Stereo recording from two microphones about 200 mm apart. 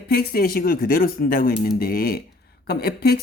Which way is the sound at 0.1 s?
50° left (ahead or behind).